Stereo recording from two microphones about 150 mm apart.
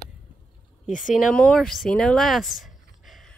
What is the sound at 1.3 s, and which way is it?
Speech, 5° left (ahead or behind).